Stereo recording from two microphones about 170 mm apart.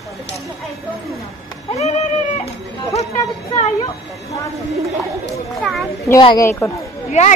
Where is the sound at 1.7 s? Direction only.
40° left (ahead or behind).